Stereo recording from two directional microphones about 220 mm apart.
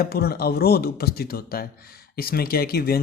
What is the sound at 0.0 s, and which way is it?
Speech, 45° left (ahead or behind).